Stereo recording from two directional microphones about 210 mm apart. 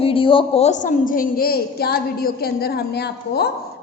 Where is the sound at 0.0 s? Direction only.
25° left (ahead or behind).